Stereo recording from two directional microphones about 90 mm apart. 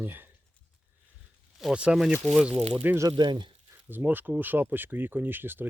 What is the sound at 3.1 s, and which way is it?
Speech, 60° right (ahead or behind).